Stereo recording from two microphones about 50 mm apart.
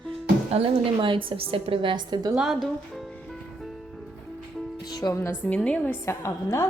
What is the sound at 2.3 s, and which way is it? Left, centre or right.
Speech, centre.